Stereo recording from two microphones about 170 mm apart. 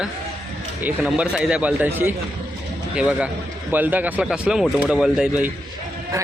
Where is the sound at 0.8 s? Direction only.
5° right (ahead or behind).